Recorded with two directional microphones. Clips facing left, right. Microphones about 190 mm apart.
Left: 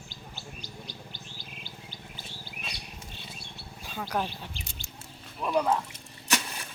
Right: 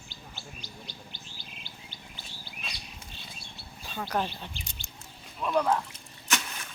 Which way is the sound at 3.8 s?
10° left (ahead or behind).